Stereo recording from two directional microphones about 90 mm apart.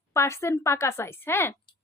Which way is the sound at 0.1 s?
30° left (ahead or behind).